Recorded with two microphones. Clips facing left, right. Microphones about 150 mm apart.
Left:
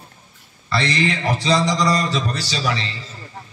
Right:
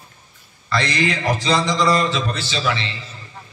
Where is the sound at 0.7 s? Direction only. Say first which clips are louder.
Even; 30° left (ahead or behind).